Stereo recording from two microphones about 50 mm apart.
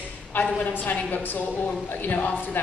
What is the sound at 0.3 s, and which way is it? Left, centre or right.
A woman's voice, left.